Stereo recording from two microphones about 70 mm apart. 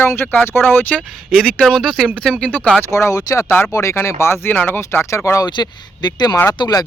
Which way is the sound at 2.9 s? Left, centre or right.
Left.